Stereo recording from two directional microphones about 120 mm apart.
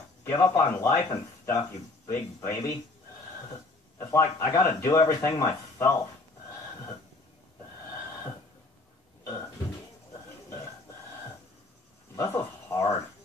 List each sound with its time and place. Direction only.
0.4 s speech: 35° left (ahead or behind)
4.0 s speech: 25° left (ahead or behind)
12.2 s speech: 20° left (ahead or behind)